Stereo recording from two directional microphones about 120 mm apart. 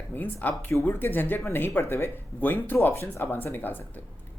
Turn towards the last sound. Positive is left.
turn(degrees=15)  # may be behind; listen again after turning